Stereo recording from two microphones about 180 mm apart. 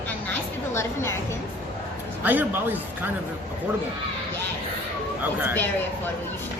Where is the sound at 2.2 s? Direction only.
10° right (ahead or behind).